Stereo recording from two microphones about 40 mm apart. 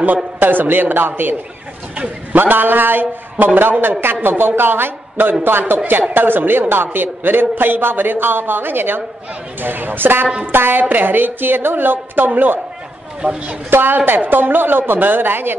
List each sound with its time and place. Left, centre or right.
0.0 s a man's voice: right
2.3 s a man's voice: right